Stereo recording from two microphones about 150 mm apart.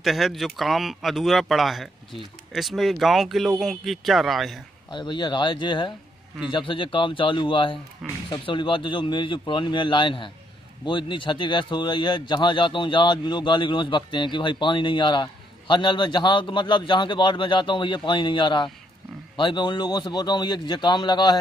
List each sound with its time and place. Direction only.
0.0 s speech: centre (ahead or behind)
4.9 s a man's voice: 30° left (ahead or behind)